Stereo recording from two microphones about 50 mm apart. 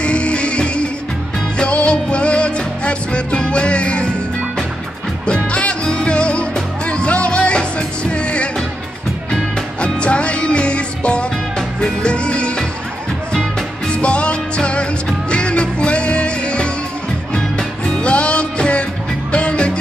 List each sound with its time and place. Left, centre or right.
0.0 s music: left
5.2 s music: left